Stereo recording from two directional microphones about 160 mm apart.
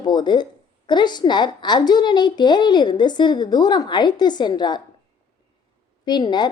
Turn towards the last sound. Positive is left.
turn(degrees=25)  # may be behind; listen again after turning